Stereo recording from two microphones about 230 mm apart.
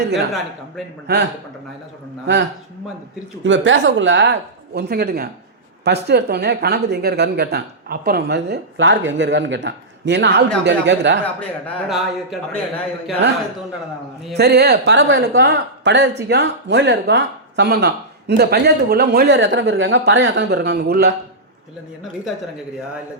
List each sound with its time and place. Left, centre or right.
2.2 s speech: right
11.3 s a man's voice: centre
14.3 s speech: right